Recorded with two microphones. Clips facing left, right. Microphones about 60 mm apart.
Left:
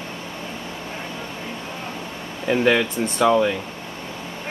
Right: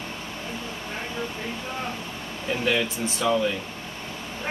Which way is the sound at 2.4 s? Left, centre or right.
Left.